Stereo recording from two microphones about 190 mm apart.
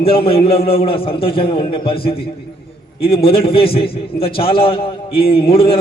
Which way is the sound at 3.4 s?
30° left (ahead or behind).